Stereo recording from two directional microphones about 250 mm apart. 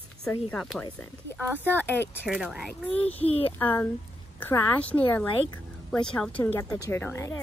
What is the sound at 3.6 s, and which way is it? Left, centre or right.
A woman's voice, centre.